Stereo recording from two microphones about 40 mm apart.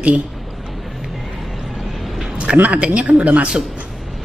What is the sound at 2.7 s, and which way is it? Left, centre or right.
Speech, right.